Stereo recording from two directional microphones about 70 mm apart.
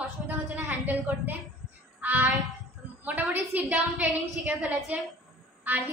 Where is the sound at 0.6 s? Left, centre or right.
Right.